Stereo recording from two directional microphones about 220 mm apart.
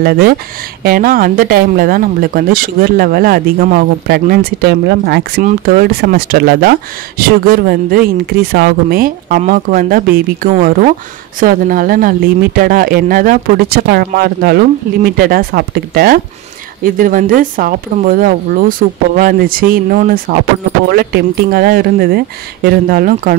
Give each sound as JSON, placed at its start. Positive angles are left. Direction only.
{"t": 0.0, "sound": "speech", "side_deg": -45}